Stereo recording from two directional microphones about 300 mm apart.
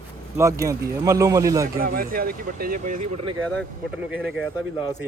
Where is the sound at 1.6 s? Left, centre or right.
Right.